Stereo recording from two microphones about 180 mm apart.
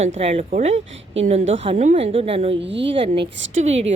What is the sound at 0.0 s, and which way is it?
A woman's voice, 35° right (ahead or behind).